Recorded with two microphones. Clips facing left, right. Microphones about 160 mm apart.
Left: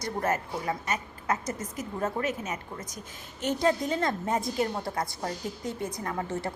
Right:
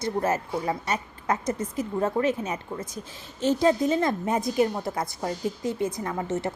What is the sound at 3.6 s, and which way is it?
A woman's voice, 20° right (ahead or behind).